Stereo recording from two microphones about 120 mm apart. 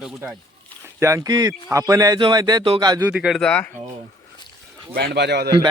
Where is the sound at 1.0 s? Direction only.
25° right (ahead or behind).